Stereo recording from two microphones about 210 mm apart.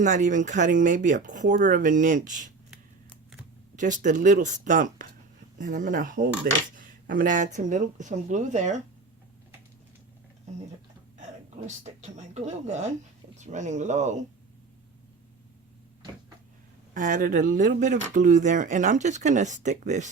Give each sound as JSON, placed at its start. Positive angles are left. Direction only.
{"t": 0.0, "sound": "cutlery", "side_deg": -35}
{"t": 3.8, "sound": "cutlery", "side_deg": -35}
{"t": 11.6, "sound": "cutlery", "side_deg": -35}
{"t": 16.9, "sound": "cutlery", "side_deg": -40}